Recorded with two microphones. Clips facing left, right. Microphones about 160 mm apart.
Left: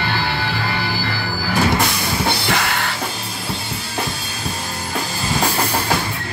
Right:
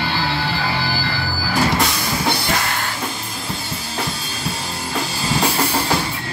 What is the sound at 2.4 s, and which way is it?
Music, 75° left (ahead or behind).